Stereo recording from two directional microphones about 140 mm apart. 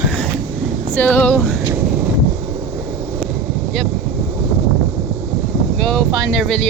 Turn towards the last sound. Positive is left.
turn(degrees=5)  # may be behind; listen again after turning